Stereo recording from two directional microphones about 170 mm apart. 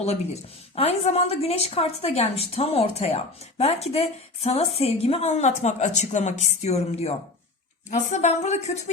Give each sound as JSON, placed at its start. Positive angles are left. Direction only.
{"t": 0.8, "sound": "a woman's voice", "side_deg": 40}